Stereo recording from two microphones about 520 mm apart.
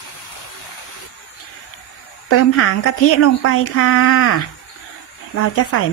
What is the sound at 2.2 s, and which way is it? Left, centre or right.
A woman's voice, left.